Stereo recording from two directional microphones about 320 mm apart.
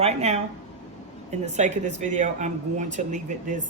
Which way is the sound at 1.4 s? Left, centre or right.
Right.